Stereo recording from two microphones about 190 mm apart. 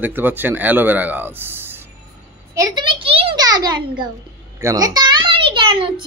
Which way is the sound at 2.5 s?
20° right (ahead or behind).